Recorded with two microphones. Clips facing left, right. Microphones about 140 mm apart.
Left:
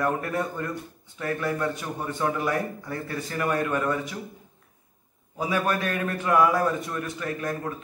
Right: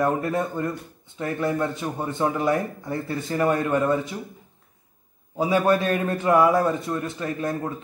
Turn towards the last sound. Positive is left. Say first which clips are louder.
# right 3 dB
turn(degrees=-25)  # may be behind; listen again after turning